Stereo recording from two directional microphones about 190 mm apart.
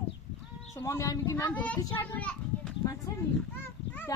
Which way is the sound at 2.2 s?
5° left (ahead or behind).